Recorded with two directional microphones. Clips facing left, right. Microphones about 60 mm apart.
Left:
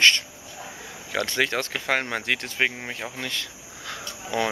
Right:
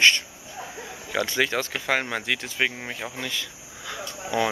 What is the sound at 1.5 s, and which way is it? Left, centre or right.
Speech, centre.